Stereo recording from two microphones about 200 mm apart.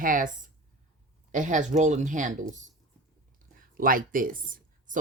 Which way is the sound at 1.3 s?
40° right (ahead or behind).